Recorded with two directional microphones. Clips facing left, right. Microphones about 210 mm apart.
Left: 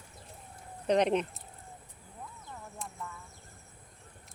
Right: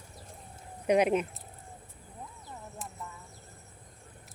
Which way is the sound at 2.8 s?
Centre (ahead or behind).